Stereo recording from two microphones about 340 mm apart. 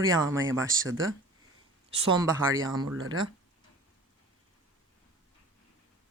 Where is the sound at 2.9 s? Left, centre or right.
Right.